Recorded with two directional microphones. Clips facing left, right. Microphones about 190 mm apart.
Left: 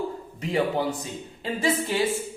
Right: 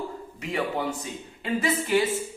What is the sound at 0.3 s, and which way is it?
Speech, 35° left (ahead or behind).